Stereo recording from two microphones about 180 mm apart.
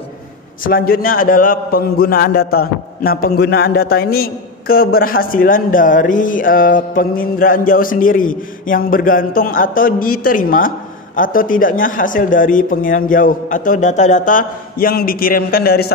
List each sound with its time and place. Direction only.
0.7 s a man's voice: 55° left (ahead or behind)